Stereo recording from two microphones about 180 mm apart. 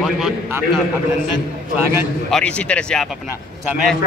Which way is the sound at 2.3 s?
5° left (ahead or behind).